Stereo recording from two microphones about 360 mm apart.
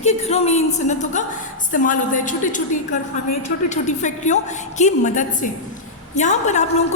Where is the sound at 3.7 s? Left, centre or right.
Centre.